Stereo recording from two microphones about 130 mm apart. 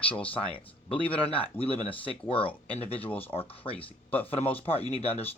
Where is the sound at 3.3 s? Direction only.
45° left (ahead or behind).